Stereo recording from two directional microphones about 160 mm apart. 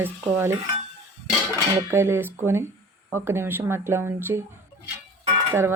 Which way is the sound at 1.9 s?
15° right (ahead or behind).